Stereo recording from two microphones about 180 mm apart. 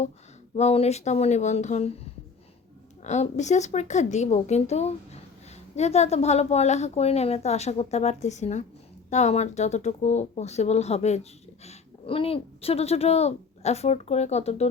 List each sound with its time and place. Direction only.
0.5 s speech: 35° left (ahead or behind)
3.0 s speech: 40° left (ahead or behind)